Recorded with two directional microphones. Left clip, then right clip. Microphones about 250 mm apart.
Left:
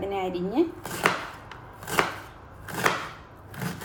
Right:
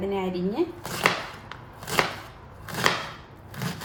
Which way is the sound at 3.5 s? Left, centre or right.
Centre.